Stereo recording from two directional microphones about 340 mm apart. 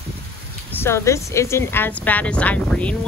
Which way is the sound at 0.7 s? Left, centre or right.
Centre.